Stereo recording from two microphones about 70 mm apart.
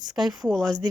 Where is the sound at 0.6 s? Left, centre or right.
Right.